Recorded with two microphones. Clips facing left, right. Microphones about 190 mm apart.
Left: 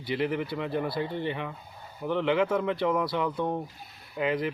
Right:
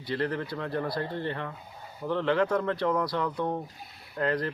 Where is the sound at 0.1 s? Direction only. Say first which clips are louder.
Left 2 dB; 5° left (ahead or behind).